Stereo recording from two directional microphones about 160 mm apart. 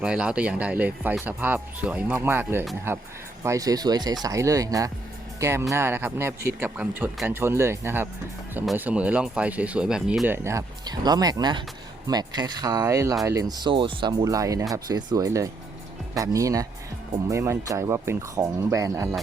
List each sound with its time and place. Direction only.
0.0 s speech: 5° right (ahead or behind); by 14.1 s 30° right (ahead or behind)
14.1 s speech: 20° right (ahead or behind)